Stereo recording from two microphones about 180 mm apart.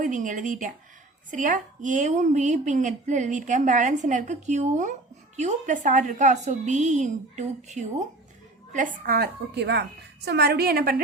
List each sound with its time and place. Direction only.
0.0 s a woman's voice: 45° right (ahead or behind)
8.7 s a woman's voice: 50° right (ahead or behind)